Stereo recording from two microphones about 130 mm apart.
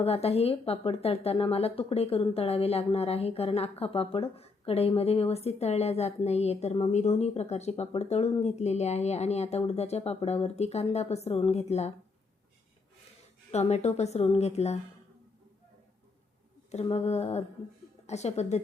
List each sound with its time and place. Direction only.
0.0 s speech: 50° left (ahead or behind)
13.5 s a woman's voice: 55° left (ahead or behind)
16.7 s a woman's voice: 55° left (ahead or behind)